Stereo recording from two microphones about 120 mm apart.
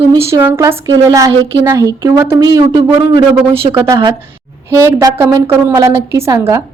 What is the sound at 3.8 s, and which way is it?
A woman's voice, 25° right (ahead or behind).